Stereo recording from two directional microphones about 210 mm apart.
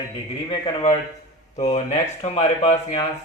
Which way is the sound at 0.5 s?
25° left (ahead or behind).